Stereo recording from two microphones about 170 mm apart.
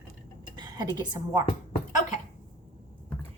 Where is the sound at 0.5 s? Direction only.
25° right (ahead or behind).